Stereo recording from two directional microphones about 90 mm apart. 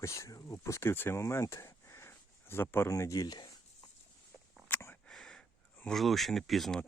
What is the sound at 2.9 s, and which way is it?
Speech, 40° left (ahead or behind).